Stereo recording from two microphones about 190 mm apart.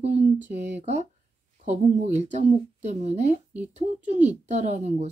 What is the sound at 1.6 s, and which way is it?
Speech, 35° right (ahead or behind).